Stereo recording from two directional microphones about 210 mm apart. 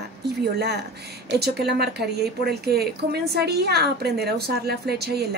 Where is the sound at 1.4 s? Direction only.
50° right (ahead or behind).